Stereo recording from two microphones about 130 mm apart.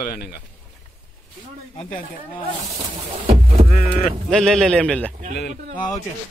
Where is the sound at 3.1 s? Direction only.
50° right (ahead or behind).